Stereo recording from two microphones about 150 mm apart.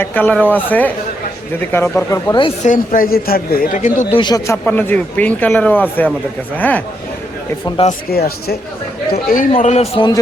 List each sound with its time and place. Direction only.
0.0 s a man's voice: 10° left (ahead or behind)
2.6 s a man's voice: 65° left (ahead or behind)
3.8 s speech: 55° left (ahead or behind)
4.1 s a man's voice: 30° left (ahead or behind); by 6.8 s 10° left (ahead or behind)
7.9 s speech: 90° left
9.1 s a man's voice: 70° left (ahead or behind)
9.6 s a man's voice: 50° left (ahead or behind)